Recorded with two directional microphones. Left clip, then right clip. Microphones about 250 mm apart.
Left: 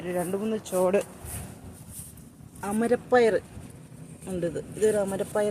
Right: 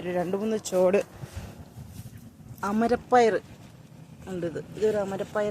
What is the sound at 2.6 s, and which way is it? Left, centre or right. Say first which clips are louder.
Speech: right 1 dB; centre.